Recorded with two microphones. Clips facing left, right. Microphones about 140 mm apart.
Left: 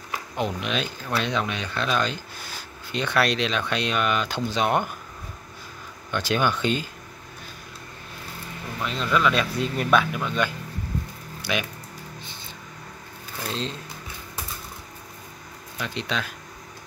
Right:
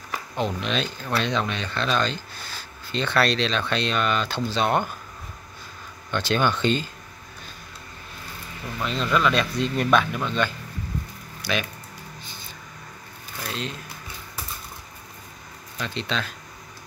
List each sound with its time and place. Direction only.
0.4 s speech: 10° left (ahead or behind)
6.1 s speech: 10° left (ahead or behind)
8.8 s speech: centre (ahead or behind)
13.5 s speech: 30° left (ahead or behind)
15.8 s speech: 15° left (ahead or behind)